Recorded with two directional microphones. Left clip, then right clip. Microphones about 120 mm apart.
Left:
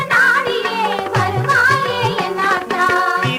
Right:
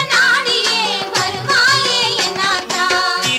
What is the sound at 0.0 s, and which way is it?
Music, 30° left (ahead or behind).